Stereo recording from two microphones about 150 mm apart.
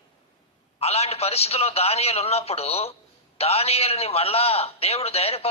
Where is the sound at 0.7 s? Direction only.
45° left (ahead or behind).